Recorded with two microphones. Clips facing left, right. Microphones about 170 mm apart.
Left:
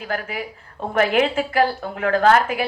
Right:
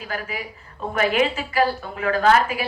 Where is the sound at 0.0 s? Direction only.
60° left (ahead or behind).